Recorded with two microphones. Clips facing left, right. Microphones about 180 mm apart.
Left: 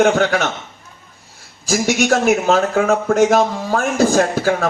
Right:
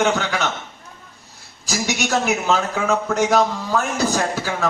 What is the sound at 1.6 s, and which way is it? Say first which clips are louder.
Speech: left 7 dB; 50° left (ahead or behind).